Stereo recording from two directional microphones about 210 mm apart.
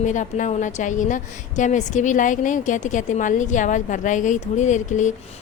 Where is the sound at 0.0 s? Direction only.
35° left (ahead or behind).